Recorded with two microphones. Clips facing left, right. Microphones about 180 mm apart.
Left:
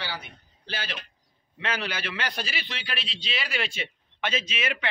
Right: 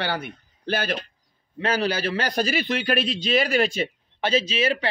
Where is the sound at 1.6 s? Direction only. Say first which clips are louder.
Right 8 dB; 35° right (ahead or behind).